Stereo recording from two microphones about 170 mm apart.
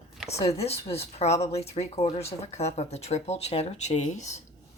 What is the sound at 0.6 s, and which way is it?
Speech, 35° left (ahead or behind).